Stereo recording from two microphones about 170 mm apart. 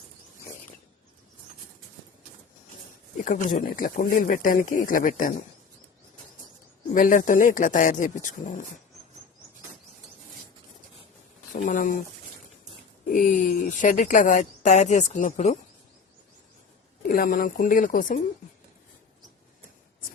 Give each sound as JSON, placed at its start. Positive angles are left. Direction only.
{"t": 3.2, "sound": "speech", "side_deg": 50}
{"t": 6.9, "sound": "speech", "side_deg": 50}
{"t": 11.5, "sound": "speech", "side_deg": 50}
{"t": 13.1, "sound": "speech", "side_deg": 55}
{"t": 17.1, "sound": "speech", "side_deg": 55}